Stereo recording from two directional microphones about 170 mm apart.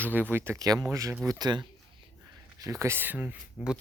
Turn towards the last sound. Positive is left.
turn(degrees=-5)  # may be behind; listen again after turning